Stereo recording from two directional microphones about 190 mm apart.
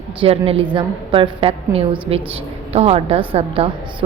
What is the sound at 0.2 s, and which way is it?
A woman's voice, 30° right (ahead or behind).